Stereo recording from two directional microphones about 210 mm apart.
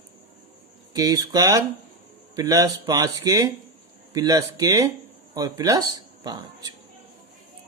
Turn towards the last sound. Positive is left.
turn(degrees=-20)  # may be behind; listen again after turning